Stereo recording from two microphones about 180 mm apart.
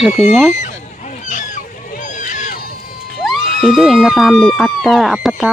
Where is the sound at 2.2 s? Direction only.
45° left (ahead or behind).